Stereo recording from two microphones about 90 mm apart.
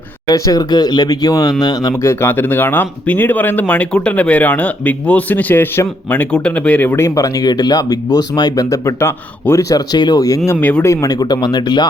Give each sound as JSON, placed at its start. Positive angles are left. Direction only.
{"t": 0.3, "sound": "speech", "side_deg": 45}
{"t": 6.3, "sound": "speech", "side_deg": 10}
{"t": 10.5, "sound": "speech", "side_deg": 20}
{"t": 10.8, "sound": "speech", "side_deg": 40}